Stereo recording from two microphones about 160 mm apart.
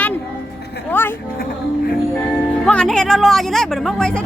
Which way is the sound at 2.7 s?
5° left (ahead or behind).